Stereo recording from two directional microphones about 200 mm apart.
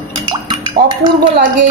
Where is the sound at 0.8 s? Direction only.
45° right (ahead or behind).